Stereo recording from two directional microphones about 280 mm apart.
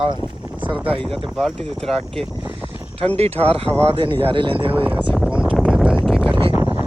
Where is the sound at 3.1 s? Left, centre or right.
Right.